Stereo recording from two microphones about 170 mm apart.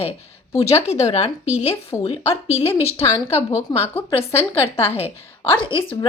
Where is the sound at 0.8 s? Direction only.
40° left (ahead or behind).